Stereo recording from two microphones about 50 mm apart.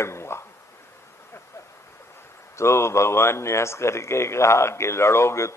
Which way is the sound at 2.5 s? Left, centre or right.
Left.